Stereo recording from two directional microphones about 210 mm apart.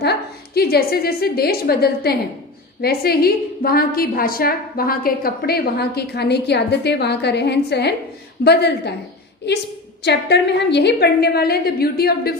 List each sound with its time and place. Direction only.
0.0 s a woman's voice: 50° left (ahead or behind)